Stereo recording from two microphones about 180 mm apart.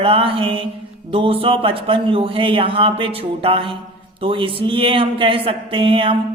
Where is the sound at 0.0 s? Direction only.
30° right (ahead or behind).